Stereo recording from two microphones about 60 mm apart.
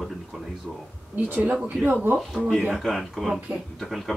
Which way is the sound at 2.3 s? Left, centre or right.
Centre.